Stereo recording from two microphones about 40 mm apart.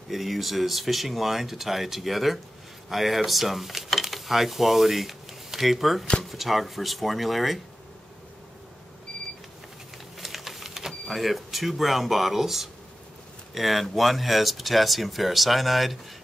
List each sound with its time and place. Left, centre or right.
0.1 s speech: centre
10.1 s typing: centre
10.9 s speech: centre